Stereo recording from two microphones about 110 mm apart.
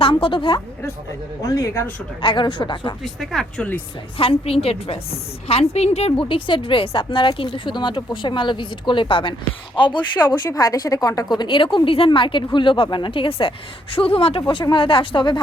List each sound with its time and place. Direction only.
0.0 s a woman's voice: 55° left (ahead or behind)
1.4 s speech: 35° left (ahead or behind)
2.2 s a woman's voice: 45° left (ahead or behind)
3.0 s speech: centre (ahead or behind)
4.2 s a woman's voice: 60° left (ahead or behind)
5.5 s a woman's voice: 70° left (ahead or behind)
14.4 s a woman's voice: 45° left (ahead or behind)